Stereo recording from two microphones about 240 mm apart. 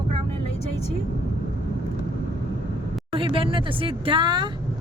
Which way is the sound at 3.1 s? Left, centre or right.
Right.